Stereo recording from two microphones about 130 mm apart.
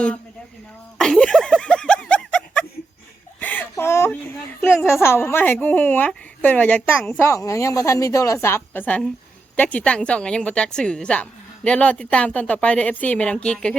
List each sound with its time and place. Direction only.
0.9 s snicker: 5° left (ahead or behind)
3.4 s a sound: 15° left (ahead or behind)
4.6 s a woman's voice: 20° left (ahead or behind)
7.3 s a woman's voice: 25° left (ahead or behind); by 13.7 s 5° left (ahead or behind)